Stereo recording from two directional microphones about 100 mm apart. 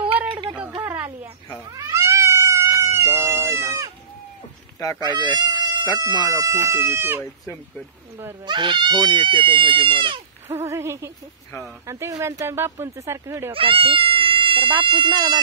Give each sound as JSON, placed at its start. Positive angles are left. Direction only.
{"t": 0.3, "sound": "a sound", "side_deg": -50}
{"t": 1.7, "sound": "cat", "side_deg": -30}
{"t": 4.7, "sound": "speech", "side_deg": 30}
{"t": 5.0, "sound": "speech", "side_deg": -50}
{"t": 8.5, "sound": "speech", "side_deg": -50}
{"t": 10.5, "sound": "speech", "side_deg": -25}
{"t": 13.5, "sound": "speech", "side_deg": -65}